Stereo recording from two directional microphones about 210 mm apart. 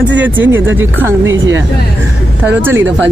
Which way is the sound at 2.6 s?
10° right (ahead or behind).